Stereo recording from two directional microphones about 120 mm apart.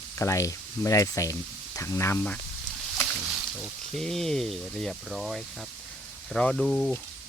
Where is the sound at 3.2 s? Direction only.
5° right (ahead or behind).